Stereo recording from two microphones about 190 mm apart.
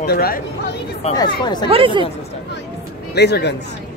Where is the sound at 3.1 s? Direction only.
60° left (ahead or behind).